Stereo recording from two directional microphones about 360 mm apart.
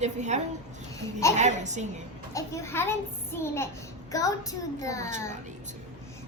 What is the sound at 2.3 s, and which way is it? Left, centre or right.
A child's voice, centre.